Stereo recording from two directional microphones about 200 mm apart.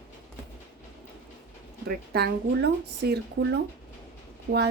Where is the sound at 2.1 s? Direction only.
55° right (ahead or behind).